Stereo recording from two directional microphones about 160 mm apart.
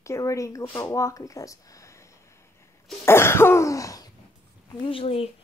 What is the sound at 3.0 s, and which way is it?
Cough, 15° left (ahead or behind).